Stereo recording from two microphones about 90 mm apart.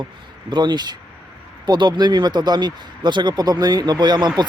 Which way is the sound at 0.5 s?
55° right (ahead or behind).